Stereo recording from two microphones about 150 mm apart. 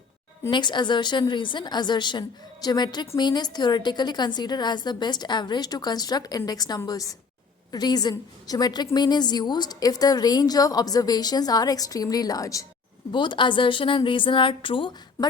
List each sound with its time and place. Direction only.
0.5 s a woman's voice: 30° left (ahead or behind)